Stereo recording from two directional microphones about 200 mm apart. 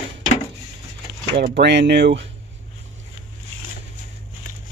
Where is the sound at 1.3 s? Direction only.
55° right (ahead or behind).